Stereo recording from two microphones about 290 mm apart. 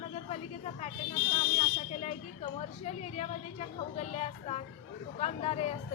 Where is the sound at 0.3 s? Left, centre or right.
Left.